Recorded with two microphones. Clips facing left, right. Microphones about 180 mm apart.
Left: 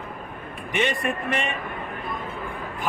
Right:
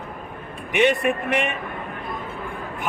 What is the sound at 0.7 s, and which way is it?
Speech, 15° right (ahead or behind).